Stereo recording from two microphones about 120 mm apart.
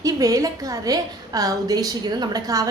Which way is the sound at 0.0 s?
30° right (ahead or behind).